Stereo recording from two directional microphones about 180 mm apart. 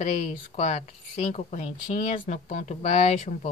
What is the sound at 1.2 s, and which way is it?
Speech, 35° left (ahead or behind).